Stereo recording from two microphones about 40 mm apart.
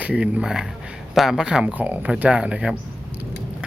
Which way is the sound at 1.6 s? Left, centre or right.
Right.